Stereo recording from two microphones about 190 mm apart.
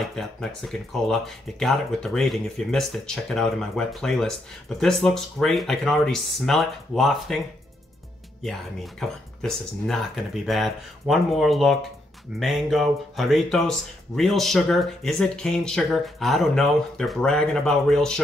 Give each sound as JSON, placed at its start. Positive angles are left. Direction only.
{"t": 0.0, "sound": "speech", "side_deg": 0}
{"t": 9.0, "sound": "speech", "side_deg": 0}